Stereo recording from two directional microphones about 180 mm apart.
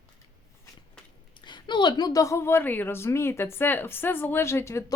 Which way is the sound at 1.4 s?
25° left (ahead or behind).